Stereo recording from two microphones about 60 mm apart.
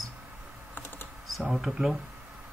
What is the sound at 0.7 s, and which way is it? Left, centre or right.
Typing, left.